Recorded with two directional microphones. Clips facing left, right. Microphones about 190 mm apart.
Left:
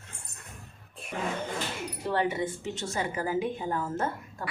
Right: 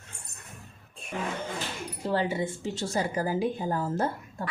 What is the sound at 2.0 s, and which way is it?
A woman's voice, 30° right (ahead or behind).